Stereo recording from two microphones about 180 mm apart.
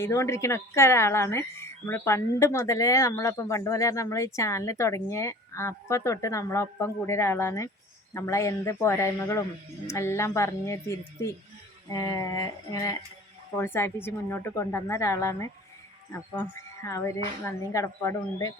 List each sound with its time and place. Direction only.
0.0 s speech: 15° left (ahead or behind)
11.9 s a sound: 20° left (ahead or behind)
13.6 s speech: 10° left (ahead or behind)